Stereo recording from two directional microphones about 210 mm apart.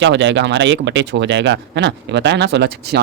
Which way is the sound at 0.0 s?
60° right (ahead or behind).